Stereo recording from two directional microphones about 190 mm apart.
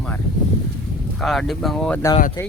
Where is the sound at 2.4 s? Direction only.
15° left (ahead or behind).